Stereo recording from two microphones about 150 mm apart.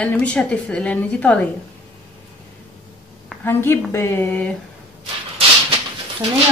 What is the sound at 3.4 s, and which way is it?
A woman's voice, 15° left (ahead or behind).